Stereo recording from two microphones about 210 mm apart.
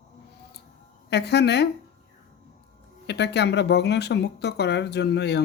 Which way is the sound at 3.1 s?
55° left (ahead or behind).